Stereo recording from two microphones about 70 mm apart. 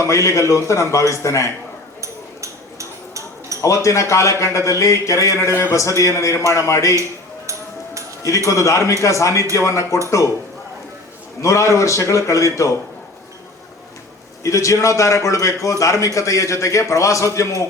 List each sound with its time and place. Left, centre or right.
0.0 s a man's voice: left
2.0 s a sound: right
3.6 s a man's voice: left
5.4 s a man's voice: left
8.4 s a man's voice: left
11.4 s a man's voice: left
14.4 s a man's voice: left